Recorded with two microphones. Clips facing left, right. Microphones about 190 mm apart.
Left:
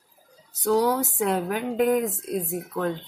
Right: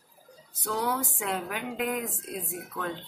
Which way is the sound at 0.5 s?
40° left (ahead or behind).